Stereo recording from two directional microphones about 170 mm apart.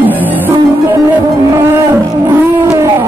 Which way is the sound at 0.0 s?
10° right (ahead or behind).